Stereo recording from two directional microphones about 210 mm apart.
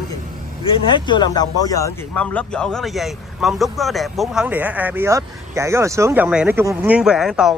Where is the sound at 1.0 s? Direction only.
20° left (ahead or behind).